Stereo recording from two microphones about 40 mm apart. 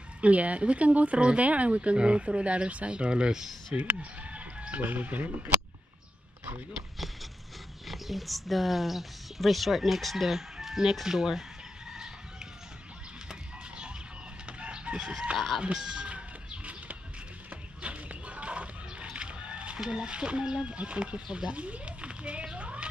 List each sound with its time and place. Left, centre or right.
0.2 s speech: right; by 3.4 s centre
3.9 s chicken: right
7.9 s speech: centre
13.3 s bird: right
14.4 s chicken: right
15.3 s speech: centre
15.6 s music: right
17.8 s a sound: right
19.8 s speech: right